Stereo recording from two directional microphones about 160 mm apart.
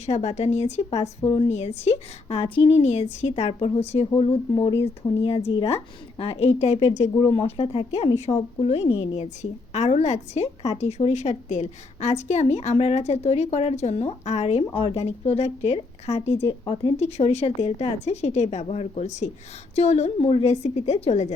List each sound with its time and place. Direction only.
0.0 s a woman's voice: 40° left (ahead or behind)
16.5 s speech: 30° left (ahead or behind)
17.0 s a woman's voice: 40° left (ahead or behind)